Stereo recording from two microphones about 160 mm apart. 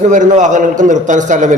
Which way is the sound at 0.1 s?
50° right (ahead or behind).